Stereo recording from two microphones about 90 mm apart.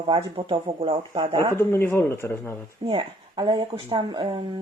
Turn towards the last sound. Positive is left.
turn(degrees=-60)  # may be behind; listen again after turning